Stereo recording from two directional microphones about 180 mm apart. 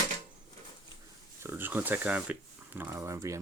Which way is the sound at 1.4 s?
10° right (ahead or behind).